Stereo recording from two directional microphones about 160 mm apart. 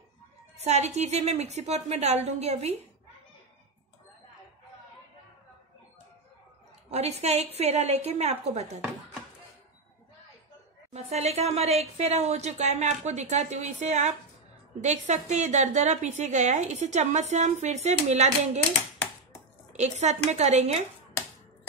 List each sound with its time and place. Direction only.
0.7 s a woman's voice: 45° right (ahead or behind)
6.9 s a woman's voice: 40° right (ahead or behind)
10.9 s a woman's voice: 40° right (ahead or behind)
19.8 s a woman's voice: 45° right (ahead or behind)